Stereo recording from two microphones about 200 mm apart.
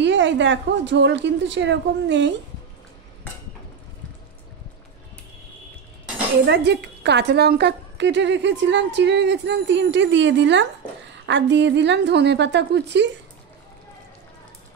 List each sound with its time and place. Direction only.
0.0 s a woman's voice: 65° right (ahead or behind)
6.4 s a woman's voice: 60° right (ahead or behind)